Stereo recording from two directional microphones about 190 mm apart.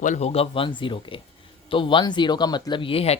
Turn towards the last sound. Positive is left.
turn(degrees=30)  # may be behind; listen again after turning